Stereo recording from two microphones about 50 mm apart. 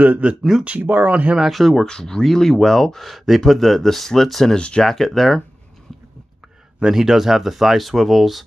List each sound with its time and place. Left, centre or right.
0.0 s speech: right
0.7 s speech: right
1.5 s speech: centre
1.9 s speech: centre
4.6 s speech: centre
4.8 s speech: centre
6.8 s speech: centre